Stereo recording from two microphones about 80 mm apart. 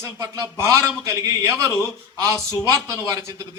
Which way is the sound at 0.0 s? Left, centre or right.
Right.